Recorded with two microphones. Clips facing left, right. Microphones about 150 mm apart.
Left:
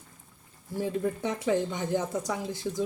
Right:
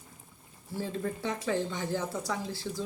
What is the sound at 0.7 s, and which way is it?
Speech, 15° left (ahead or behind).